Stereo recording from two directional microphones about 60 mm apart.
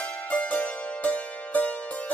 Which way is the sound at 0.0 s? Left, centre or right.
Left.